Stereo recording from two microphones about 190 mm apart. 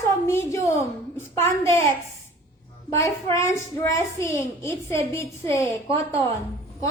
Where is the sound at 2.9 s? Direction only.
15° left (ahead or behind).